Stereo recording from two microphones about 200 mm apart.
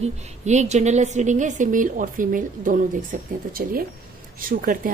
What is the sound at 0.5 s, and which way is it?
A woman's voice, 35° right (ahead or behind).